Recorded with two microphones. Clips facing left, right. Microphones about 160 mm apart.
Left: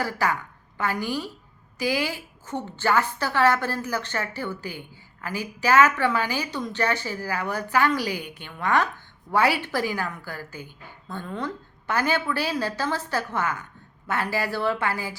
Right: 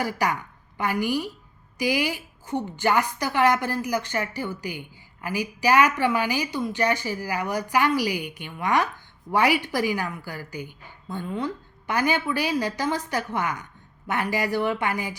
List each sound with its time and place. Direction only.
0.0 s a woman's voice: 15° right (ahead or behind)